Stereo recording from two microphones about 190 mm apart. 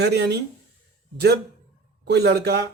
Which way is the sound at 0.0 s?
60° right (ahead or behind).